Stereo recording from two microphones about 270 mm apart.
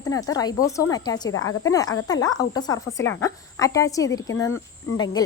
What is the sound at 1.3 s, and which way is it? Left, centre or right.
Speech, left.